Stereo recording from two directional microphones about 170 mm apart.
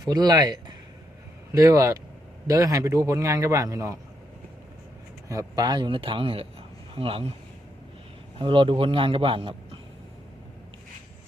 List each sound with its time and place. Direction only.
0.0 s a man's voice: 25° right (ahead or behind)
5.3 s a man's voice: 20° right (ahead or behind)
8.4 s a man's voice: 30° right (ahead or behind)